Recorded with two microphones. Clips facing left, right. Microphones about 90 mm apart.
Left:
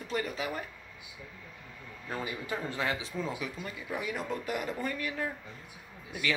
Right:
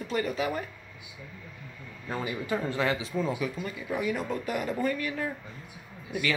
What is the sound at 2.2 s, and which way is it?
Speech, centre (ahead or behind).